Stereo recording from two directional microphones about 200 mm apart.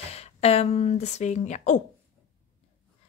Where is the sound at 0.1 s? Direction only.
30° left (ahead or behind).